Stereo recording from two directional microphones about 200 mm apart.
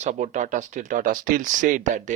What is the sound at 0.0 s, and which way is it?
Speech, 35° right (ahead or behind).